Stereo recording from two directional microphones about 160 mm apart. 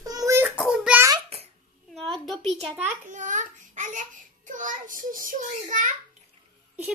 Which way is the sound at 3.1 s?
50° right (ahead or behind).